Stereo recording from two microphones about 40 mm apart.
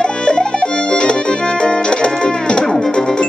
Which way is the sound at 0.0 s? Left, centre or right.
Left.